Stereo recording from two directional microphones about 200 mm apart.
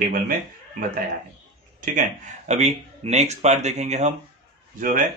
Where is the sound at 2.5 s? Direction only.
35° right (ahead or behind).